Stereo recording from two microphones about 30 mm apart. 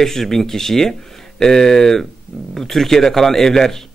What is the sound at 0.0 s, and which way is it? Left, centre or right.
Speech, centre.